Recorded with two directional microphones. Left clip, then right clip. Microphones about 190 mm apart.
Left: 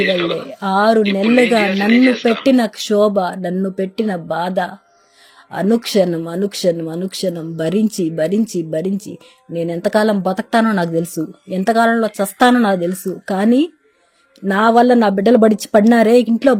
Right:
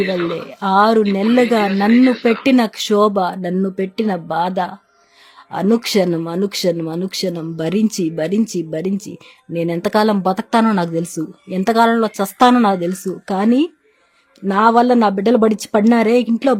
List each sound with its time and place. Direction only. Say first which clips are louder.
0.0 s speech: left 3 dB; 25° left (ahead or behind)
0.6 s speech: right 1 dB; 5° right (ahead or behind)